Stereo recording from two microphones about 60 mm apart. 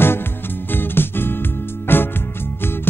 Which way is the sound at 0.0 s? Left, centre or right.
Left.